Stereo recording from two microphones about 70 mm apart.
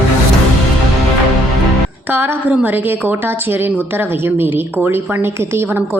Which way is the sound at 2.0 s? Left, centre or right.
Right.